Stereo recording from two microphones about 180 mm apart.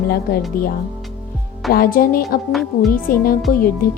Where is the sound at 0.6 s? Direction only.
55° left (ahead or behind).